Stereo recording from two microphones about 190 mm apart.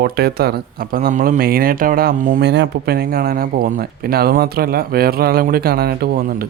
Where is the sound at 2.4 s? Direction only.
65° right (ahead or behind).